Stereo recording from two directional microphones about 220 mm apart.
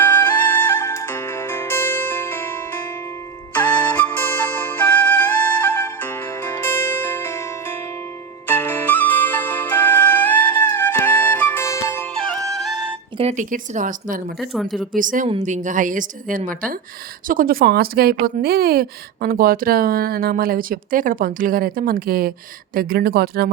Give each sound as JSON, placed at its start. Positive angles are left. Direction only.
{"t": 0.0, "sound": "music", "side_deg": 10}
{"t": 3.5, "sound": "flute", "side_deg": 5}
{"t": 8.4, "sound": "music", "side_deg": 10}
{"t": 13.1, "sound": "speech", "side_deg": -30}
{"t": 14.3, "sound": "speech", "side_deg": 0}
{"t": 14.9, "sound": "speech", "side_deg": -35}